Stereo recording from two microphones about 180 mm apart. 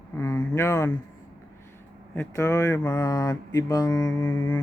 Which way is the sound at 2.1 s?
15° left (ahead or behind).